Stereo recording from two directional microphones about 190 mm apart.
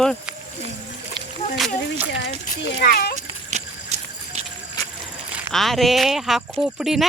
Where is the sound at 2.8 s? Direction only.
55° left (ahead or behind).